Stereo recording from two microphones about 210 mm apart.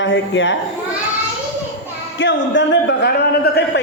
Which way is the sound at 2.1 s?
60° left (ahead or behind).